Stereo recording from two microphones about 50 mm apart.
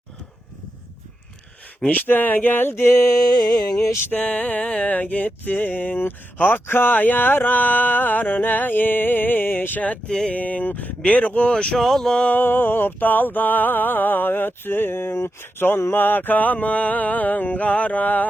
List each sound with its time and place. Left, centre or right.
1.9 s music: left
4.1 s music: left
10.1 s a sound: centre
10.3 s music: left
11.5 s a sound: centre
11.8 s speech: centre
12.3 s music: left